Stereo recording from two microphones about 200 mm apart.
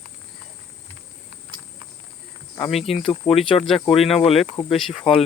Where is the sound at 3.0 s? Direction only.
30° left (ahead or behind).